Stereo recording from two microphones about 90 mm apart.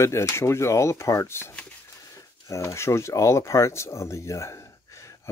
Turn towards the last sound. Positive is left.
turn(degrees=35)  # may be behind; listen again after turning